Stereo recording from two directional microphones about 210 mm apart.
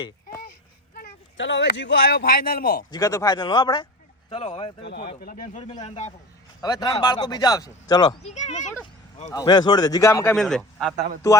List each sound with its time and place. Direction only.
0.9 s a man's voice: 60° left (ahead or behind)
2.9 s speech: 15° left (ahead or behind)
4.8 s speech: 50° left (ahead or behind); by 6.1 s 30° left (ahead or behind)
6.6 s speech: 20° left (ahead or behind)
8.2 s speech: 30° left (ahead or behind)
9.3 s a man's voice: 20° left (ahead or behind)
10.3 s a man's voice: centre (ahead or behind)